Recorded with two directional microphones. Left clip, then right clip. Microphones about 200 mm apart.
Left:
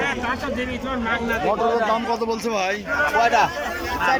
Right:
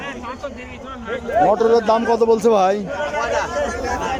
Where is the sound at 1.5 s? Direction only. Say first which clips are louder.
Right 4 dB; 20° right (ahead or behind).